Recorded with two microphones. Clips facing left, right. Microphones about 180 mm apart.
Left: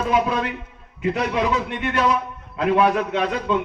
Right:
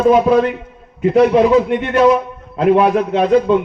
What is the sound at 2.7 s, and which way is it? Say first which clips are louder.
Speech: right 3 dB; 35° right (ahead or behind).